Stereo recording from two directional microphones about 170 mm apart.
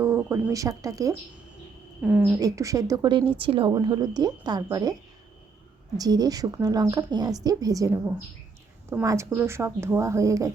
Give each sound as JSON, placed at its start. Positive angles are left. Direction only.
{"t": 0.0, "sound": "speech", "side_deg": -15}
{"t": 2.0, "sound": "speech", "side_deg": -5}
{"t": 2.4, "sound": "a woman's voice", "side_deg": -20}
{"t": 6.0, "sound": "a woman's voice", "side_deg": -20}